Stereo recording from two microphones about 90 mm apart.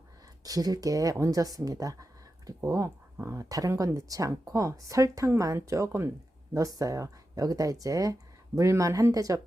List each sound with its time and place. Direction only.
0.4 s speech: 45° right (ahead or behind)